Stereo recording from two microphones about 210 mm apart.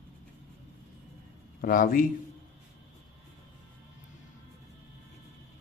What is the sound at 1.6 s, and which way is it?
Speech, 40° left (ahead or behind).